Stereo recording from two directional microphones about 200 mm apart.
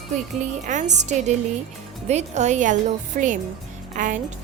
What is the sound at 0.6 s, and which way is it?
A woman's voice, 35° right (ahead or behind).